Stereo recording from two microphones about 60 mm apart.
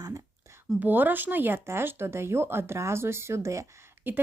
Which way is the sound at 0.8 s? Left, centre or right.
Right.